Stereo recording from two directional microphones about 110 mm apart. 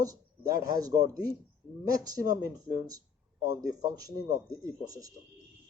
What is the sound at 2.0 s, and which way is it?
Speech, 35° right (ahead or behind).